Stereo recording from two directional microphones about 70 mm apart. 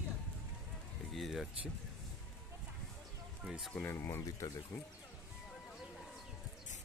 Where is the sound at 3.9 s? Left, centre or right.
Left.